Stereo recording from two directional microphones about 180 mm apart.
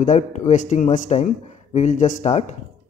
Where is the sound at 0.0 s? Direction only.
45° left (ahead or behind).